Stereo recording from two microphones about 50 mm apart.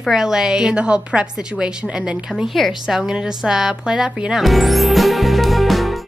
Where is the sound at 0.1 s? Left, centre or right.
Centre.